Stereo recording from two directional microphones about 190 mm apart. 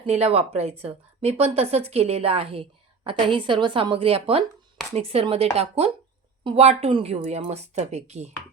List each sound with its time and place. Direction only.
0.0 s a woman's voice: 30° right (ahead or behind)